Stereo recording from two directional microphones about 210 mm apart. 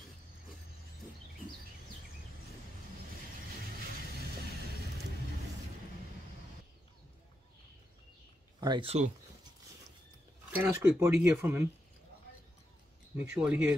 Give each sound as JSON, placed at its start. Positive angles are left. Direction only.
{"t": 8.5, "sound": "speech", "side_deg": -20}
{"t": 10.5, "sound": "speech", "side_deg": -10}
{"t": 13.2, "sound": "speech", "side_deg": -5}